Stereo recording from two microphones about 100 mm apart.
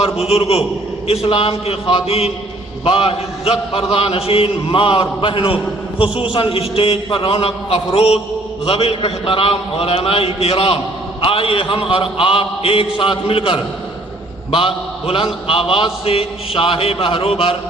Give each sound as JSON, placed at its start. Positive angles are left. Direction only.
{"t": 0.0, "sound": "a man's voice", "side_deg": 80}
{"t": 2.8, "sound": "a man's voice", "side_deg": 70}